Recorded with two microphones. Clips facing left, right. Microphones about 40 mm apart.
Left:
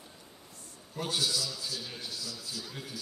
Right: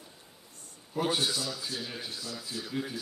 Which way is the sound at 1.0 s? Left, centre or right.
Right.